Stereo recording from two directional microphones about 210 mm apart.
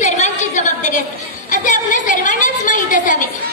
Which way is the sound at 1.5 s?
40° left (ahead or behind).